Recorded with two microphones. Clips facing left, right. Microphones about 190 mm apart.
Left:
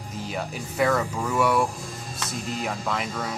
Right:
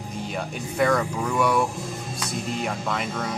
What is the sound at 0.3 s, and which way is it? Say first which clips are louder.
Speech: even; centre (ahead or behind).